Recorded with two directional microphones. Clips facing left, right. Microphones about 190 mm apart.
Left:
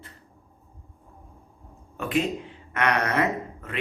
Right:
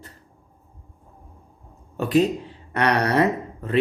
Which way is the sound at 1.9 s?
35° right (ahead or behind).